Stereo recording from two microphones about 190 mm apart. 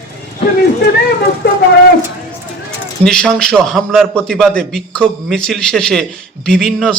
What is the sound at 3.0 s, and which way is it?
A man's voice, 5° left (ahead or behind).